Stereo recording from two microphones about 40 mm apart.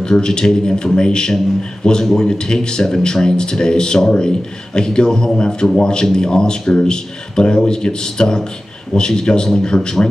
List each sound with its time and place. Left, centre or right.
0.0 s speech: centre